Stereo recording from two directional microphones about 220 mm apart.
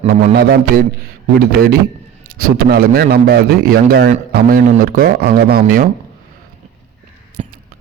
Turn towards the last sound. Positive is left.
turn(degrees=-30)  # may be behind; listen again after turning